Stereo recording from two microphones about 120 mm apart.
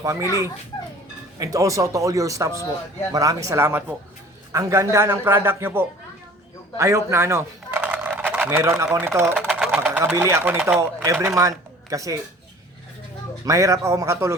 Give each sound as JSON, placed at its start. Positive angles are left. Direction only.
{"t": 0.0, "sound": "a man's voice", "side_deg": -25}
{"t": 2.5, "sound": "a man's voice", "side_deg": 30}
{"t": 3.1, "sound": "a man's voice", "side_deg": -30}
{"t": 4.5, "sound": "a man's voice", "side_deg": -30}
{"t": 7.8, "sound": "a sound", "side_deg": -15}
{"t": 8.4, "sound": "a man's voice", "side_deg": -25}
{"t": 9.5, "sound": "sewing machine", "side_deg": -10}
{"t": 10.8, "sound": "speech", "side_deg": -25}
{"t": 13.4, "sound": "a man's voice", "side_deg": -25}